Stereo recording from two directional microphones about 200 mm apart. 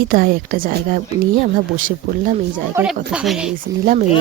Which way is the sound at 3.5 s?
40° right (ahead or behind).